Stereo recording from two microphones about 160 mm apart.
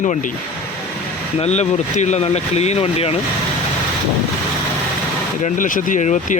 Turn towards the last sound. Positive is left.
turn(degrees=50)  # may be behind; listen again after turning